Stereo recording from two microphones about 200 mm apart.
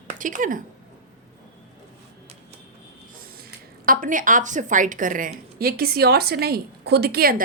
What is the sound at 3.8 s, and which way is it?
A woman's voice, 45° right (ahead or behind).